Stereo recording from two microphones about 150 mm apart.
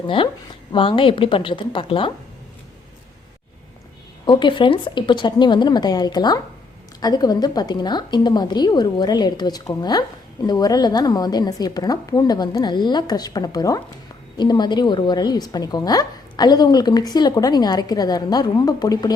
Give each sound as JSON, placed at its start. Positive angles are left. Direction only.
{"t": 0.7, "sound": "a woman's voice", "side_deg": 35}
{"t": 4.3, "sound": "a woman's voice", "side_deg": 30}